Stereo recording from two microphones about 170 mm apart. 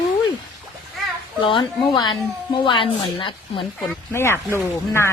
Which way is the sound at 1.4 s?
25° left (ahead or behind).